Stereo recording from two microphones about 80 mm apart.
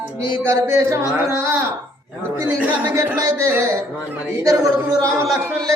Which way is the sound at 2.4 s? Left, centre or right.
Right.